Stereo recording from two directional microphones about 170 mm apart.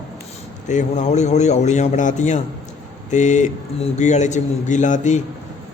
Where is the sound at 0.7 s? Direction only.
45° left (ahead or behind).